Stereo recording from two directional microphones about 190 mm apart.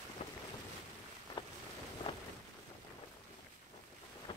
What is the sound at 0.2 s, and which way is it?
Boat, 35° left (ahead or behind).